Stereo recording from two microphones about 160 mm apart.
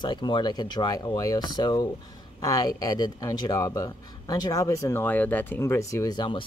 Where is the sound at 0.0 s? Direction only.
30° left (ahead or behind).